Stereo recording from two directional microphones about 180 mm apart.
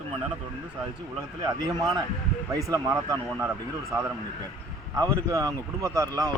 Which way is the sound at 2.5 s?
20° right (ahead or behind).